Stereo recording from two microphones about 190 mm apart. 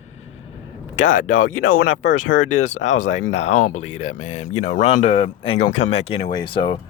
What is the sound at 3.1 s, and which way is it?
Speech, 90° left.